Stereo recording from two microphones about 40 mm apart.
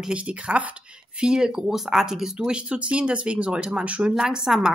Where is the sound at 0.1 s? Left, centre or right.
Right.